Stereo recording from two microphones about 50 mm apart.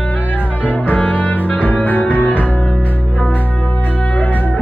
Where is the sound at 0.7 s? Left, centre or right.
Left.